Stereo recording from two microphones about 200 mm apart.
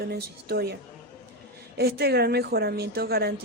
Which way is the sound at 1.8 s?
50° right (ahead or behind).